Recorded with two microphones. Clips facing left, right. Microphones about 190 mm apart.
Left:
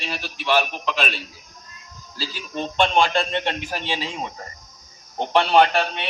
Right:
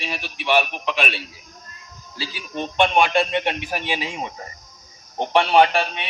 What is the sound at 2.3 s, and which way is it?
A man's voice, 15° right (ahead or behind).